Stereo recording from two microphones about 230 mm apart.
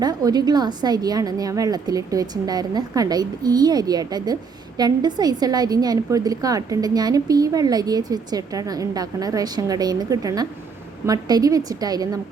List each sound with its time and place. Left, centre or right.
0.0 s a woman's voice: centre